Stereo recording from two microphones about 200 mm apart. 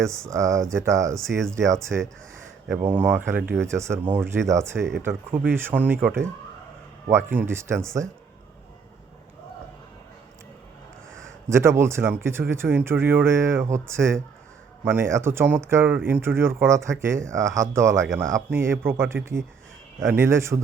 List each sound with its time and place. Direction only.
0.3 s speech: 15° right (ahead or behind)
11.1 s a sound: 75° right (ahead or behind)
11.4 s speech: 15° right (ahead or behind)